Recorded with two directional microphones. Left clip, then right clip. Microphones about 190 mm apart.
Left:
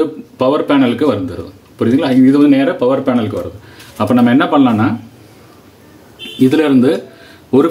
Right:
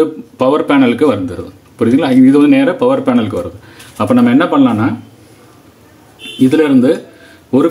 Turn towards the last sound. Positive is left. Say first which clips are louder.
# even
turn(degrees=5)  # may be behind; listen again after turning